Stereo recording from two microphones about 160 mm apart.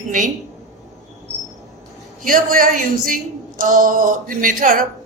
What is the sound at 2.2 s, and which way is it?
Speech, 60° right (ahead or behind).